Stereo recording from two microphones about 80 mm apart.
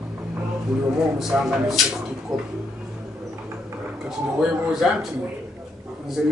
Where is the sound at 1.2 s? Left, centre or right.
Centre.